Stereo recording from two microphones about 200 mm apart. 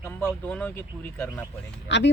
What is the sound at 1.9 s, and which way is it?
Speech, 60° left (ahead or behind).